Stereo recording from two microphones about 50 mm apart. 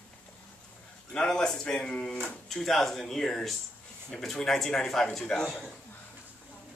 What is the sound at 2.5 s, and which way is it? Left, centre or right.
A man's voice, centre.